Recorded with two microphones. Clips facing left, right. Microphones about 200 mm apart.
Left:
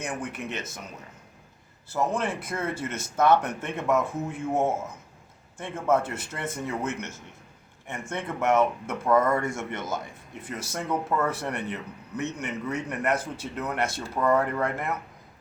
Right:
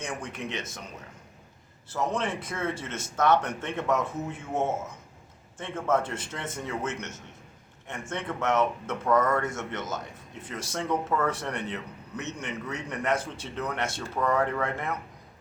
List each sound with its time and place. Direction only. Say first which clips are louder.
0.0 s a man's voice: left 2 dB; 5° left (ahead or behind)
1.9 s a man's voice: left 2 dB; 10° left (ahead or behind)
8.1 s a man's voice: left 3 dB; 10° left (ahead or behind)